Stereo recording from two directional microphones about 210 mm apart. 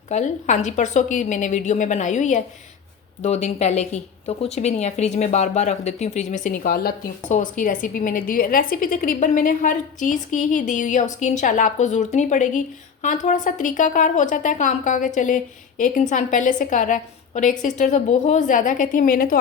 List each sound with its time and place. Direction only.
0.1 s a woman's voice: 35° left (ahead or behind)